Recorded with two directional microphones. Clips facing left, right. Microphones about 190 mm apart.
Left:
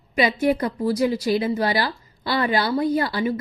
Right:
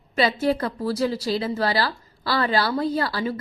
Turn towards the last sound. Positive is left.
turn(degrees=20)  # may be behind; listen again after turning